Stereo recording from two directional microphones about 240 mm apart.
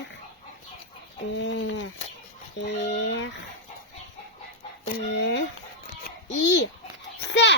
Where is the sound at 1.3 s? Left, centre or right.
Left.